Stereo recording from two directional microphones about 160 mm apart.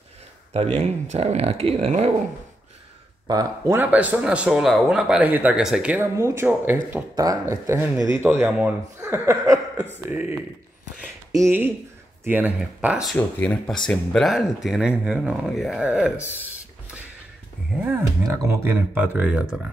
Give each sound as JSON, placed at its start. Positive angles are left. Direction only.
{"t": 0.5, "sound": "speech", "side_deg": -40}
{"t": 3.3, "sound": "speech", "side_deg": -20}
{"t": 6.1, "sound": "speech", "side_deg": -15}
{"t": 9.0, "sound": "a sound", "side_deg": -15}
{"t": 11.3, "sound": "speech", "side_deg": -15}
{"t": 13.1, "sound": "speech", "side_deg": 5}
{"t": 17.8, "sound": "speech", "side_deg": -15}